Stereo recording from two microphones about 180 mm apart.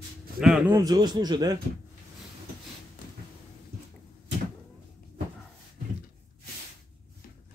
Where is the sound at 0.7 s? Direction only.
20° right (ahead or behind).